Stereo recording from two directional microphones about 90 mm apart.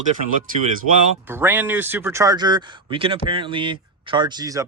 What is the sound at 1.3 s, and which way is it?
Speech, 25° right (ahead or behind).